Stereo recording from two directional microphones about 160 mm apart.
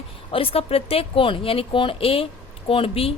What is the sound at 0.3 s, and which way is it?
A woman's voice, 35° left (ahead or behind).